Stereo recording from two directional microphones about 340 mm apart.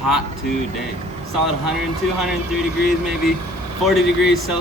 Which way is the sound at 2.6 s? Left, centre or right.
Centre.